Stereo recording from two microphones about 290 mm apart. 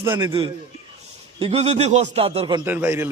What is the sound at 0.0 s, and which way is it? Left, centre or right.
A man's voice, centre.